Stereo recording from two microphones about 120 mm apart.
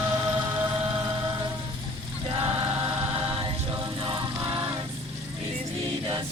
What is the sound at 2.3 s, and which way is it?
Choir, 35° right (ahead or behind).